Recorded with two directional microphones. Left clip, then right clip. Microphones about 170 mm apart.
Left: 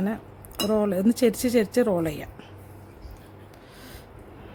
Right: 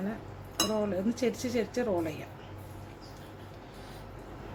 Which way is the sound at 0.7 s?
60° left (ahead or behind).